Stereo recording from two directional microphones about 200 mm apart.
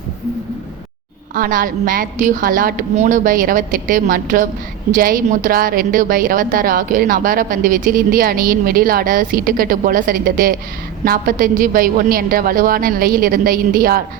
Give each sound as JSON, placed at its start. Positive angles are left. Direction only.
{"t": 1.4, "sound": "a woman's voice", "side_deg": -45}